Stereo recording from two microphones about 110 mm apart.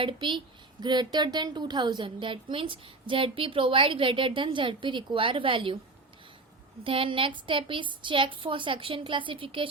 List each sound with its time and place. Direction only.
0.0 s speech: 50° right (ahead or behind)
6.8 s speech: 55° right (ahead or behind)